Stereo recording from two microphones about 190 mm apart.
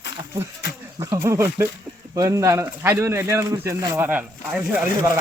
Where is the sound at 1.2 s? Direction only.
15° right (ahead or behind).